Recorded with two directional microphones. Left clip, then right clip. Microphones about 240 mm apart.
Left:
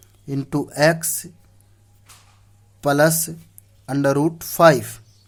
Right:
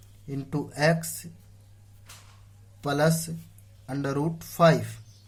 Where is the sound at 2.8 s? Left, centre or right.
Left.